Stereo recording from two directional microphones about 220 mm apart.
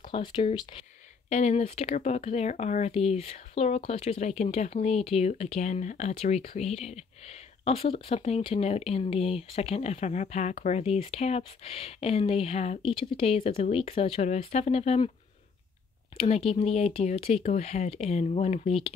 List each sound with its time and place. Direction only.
0.0 s speech: 20° left (ahead or behind)
16.2 s speech: 25° left (ahead or behind)